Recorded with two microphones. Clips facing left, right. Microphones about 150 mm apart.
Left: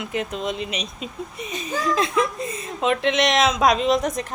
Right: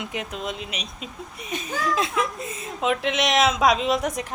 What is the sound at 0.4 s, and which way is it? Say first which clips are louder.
Speech: left 5 dB; centre (ahead or behind).